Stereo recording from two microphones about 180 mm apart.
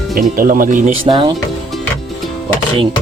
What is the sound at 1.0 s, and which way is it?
Speech, 30° right (ahead or behind).